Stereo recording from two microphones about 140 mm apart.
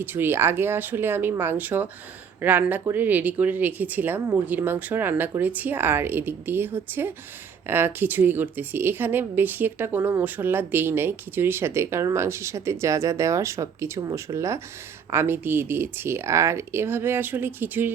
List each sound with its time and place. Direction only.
0.0 s a woman's voice: 15° right (ahead or behind)